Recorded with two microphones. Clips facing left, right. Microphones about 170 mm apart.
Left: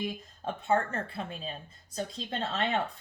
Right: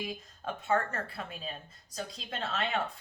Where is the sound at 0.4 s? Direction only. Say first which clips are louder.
Left 2 dB; 25° left (ahead or behind).